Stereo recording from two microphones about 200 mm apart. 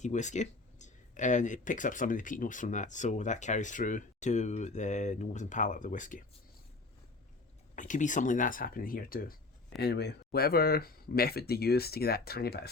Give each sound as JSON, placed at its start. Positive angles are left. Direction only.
{"t": 0.0, "sound": "speech", "side_deg": 35}
{"t": 7.8, "sound": "speech", "side_deg": 40}